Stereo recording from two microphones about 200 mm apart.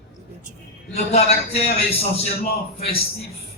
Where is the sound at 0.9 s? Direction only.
30° left (ahead or behind).